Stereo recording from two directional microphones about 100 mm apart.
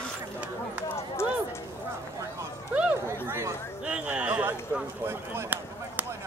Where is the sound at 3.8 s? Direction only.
10° right (ahead or behind).